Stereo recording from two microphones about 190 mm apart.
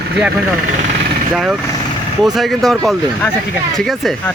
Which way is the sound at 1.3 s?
5° right (ahead or behind).